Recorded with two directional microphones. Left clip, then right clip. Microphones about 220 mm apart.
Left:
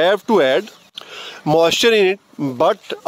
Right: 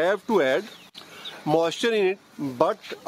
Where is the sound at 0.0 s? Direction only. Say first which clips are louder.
Left 8 dB; 40° left (ahead or behind).